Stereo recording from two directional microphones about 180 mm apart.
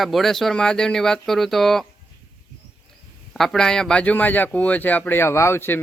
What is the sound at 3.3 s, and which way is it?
Speech, centre (ahead or behind).